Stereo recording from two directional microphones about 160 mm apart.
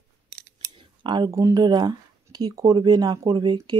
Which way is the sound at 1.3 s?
20° right (ahead or behind).